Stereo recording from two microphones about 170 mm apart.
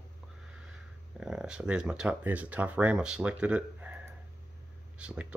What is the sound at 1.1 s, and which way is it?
Speech, 5° right (ahead or behind).